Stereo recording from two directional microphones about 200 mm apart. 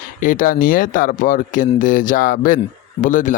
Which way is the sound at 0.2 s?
40° left (ahead or behind).